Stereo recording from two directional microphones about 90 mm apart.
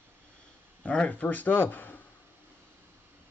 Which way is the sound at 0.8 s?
15° left (ahead or behind).